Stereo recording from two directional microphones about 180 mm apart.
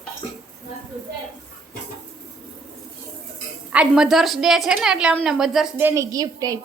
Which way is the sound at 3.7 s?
5° right (ahead or behind).